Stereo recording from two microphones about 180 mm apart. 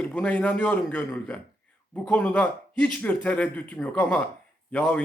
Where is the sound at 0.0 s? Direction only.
5° left (ahead or behind).